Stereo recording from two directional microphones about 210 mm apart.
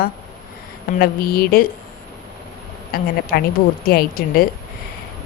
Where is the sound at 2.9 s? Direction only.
45° left (ahead or behind).